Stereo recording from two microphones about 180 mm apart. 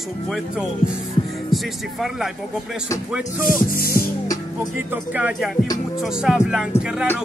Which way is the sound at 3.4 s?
50° left (ahead or behind).